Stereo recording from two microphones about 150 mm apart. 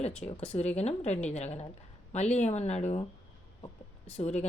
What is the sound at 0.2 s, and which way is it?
Speech, 60° left (ahead or behind).